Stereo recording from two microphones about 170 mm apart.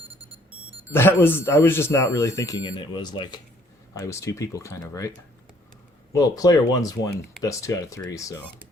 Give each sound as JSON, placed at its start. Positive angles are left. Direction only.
{"t": 0.9, "sound": "speech", "side_deg": 15}
{"t": 6.1, "sound": "speech", "side_deg": 20}